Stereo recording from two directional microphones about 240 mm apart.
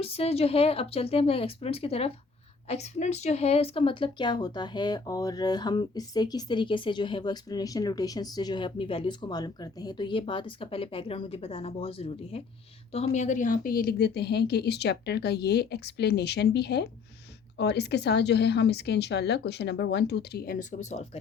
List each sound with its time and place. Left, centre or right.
0.0 s a woman's voice: left